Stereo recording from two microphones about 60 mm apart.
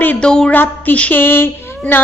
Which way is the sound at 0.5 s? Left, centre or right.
Left.